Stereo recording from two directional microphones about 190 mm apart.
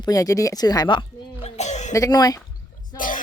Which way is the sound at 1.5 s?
35° left (ahead or behind).